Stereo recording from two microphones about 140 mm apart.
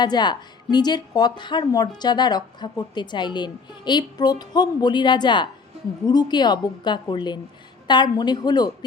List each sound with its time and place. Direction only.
0.0 s a woman's voice: 30° left (ahead or behind)